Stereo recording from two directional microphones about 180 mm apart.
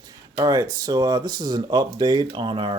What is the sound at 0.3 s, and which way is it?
Speech, 20° right (ahead or behind).